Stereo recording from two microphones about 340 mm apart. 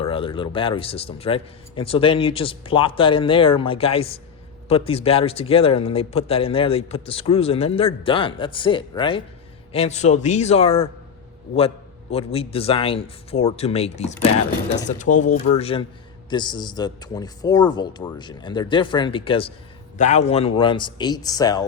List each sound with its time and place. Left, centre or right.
0.0 s speech: centre
12.1 s speech: centre